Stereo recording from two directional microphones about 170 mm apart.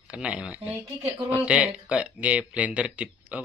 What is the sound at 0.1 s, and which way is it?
Speech, 5° right (ahead or behind).